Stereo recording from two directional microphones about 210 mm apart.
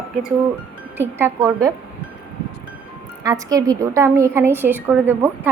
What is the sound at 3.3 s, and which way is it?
A woman's voice, 15° right (ahead or behind).